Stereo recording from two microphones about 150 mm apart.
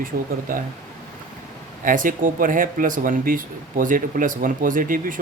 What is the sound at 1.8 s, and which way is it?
Speech, 65° right (ahead or behind).